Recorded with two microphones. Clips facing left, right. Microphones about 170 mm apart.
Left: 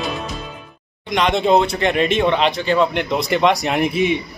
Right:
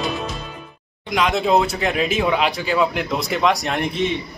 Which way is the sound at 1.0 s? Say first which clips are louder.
Left 2 dB; centre (ahead or behind).